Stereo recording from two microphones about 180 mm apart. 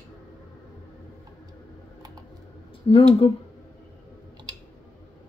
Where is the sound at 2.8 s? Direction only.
30° left (ahead or behind).